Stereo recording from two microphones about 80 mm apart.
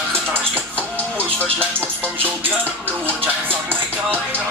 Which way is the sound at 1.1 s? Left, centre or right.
Centre.